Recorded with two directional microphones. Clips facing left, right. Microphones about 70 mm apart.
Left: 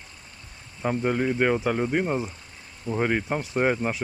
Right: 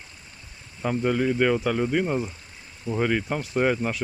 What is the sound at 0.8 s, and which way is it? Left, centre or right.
Speech, centre.